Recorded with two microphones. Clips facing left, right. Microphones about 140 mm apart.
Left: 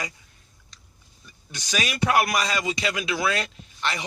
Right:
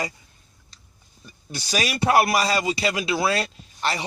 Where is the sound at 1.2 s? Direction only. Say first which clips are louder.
Right 6 dB; 35° right (ahead or behind).